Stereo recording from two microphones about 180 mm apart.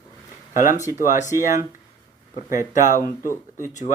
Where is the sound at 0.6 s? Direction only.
45° left (ahead or behind).